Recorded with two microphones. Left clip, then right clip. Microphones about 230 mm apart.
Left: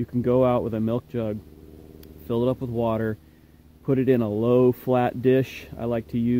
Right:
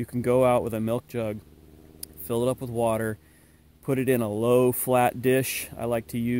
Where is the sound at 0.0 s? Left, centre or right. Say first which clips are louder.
Left 1 dB; right.